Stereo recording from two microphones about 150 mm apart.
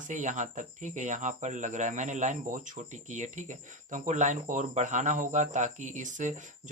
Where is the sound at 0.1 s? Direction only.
55° right (ahead or behind).